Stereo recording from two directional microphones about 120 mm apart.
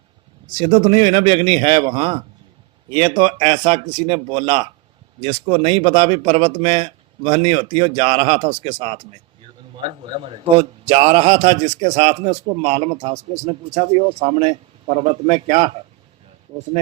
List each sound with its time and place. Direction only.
0.4 s a man's voice: 40° right (ahead or behind); by 14.0 s 65° right (ahead or behind)
14.2 s a man's voice: 55° right (ahead or behind)